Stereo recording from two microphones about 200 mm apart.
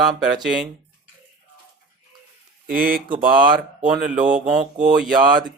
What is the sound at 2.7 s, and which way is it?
Speech, 45° right (ahead or behind).